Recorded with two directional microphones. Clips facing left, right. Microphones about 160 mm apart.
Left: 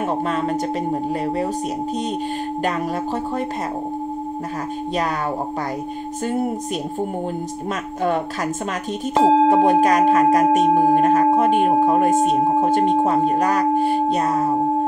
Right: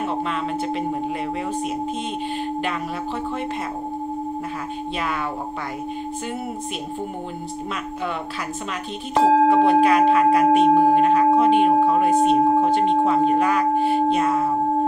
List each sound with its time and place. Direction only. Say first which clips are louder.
9.1 s speech: left 1 dB; 20° left (ahead or behind)
9.5 s speech: left 1 dB; 45° left (ahead or behind)
12.6 s singing bowl: left 1 dB; 45° left (ahead or behind)